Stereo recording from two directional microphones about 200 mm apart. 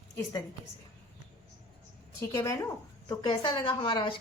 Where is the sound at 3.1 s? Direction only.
25° left (ahead or behind).